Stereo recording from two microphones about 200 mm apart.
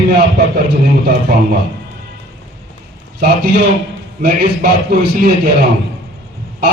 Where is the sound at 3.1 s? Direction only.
50° right (ahead or behind).